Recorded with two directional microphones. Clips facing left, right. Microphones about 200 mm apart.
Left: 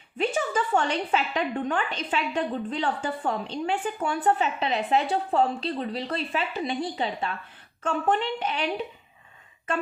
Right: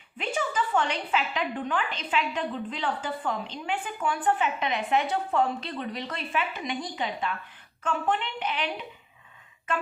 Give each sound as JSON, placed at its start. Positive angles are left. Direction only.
{"t": 0.2, "sound": "a woman's voice", "side_deg": 45}